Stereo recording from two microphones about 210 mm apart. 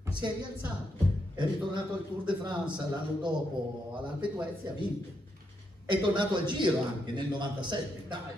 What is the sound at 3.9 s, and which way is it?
Speech, 20° right (ahead or behind).